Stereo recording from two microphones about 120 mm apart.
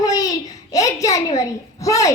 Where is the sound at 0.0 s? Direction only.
30° left (ahead or behind).